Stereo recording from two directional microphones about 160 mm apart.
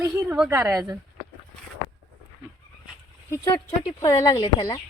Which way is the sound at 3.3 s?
20° left (ahead or behind).